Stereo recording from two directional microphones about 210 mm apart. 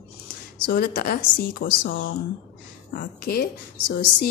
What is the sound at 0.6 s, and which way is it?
A woman's voice, 45° left (ahead or behind).